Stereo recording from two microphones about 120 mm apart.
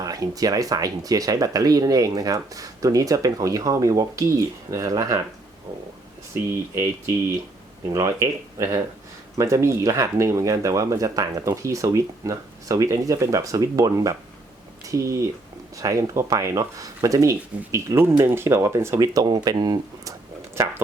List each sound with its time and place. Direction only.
0.0 s speech: 30° right (ahead or behind)
6.5 s speech: 20° right (ahead or behind)